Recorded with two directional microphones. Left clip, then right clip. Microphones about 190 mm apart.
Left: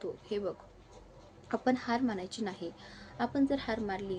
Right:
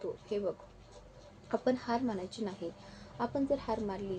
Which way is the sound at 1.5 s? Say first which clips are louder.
Left 1 dB; 15° left (ahead or behind).